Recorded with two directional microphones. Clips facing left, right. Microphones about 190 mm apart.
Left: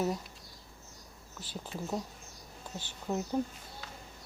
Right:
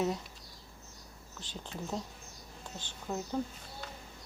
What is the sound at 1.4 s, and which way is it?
Speech, 5° left (ahead or behind).